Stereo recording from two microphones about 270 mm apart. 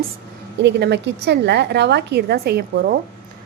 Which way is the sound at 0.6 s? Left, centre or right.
Right.